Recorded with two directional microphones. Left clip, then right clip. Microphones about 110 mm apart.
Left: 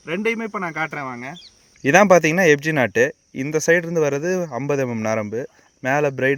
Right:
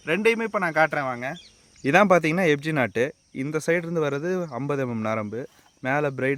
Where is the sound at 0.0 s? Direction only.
40° right (ahead or behind).